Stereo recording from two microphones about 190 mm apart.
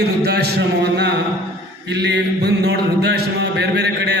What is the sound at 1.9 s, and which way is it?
Mantra, 65° right (ahead or behind).